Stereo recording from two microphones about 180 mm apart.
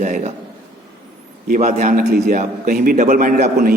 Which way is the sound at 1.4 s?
45° right (ahead or behind).